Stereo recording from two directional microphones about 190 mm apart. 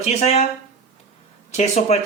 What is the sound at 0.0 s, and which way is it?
Speech, 35° left (ahead or behind).